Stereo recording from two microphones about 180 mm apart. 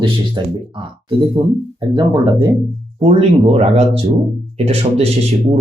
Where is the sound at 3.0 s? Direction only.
35° right (ahead or behind).